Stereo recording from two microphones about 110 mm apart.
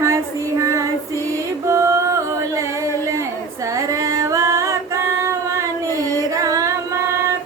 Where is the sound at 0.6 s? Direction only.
30° right (ahead or behind).